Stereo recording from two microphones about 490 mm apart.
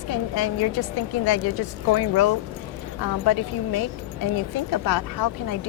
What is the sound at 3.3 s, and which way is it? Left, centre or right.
Speech, left.